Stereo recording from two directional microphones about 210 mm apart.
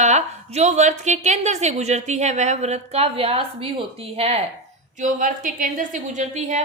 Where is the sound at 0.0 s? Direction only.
35° right (ahead or behind).